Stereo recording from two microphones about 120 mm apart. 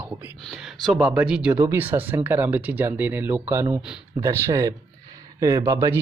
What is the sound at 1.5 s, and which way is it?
Speech, 20° right (ahead or behind).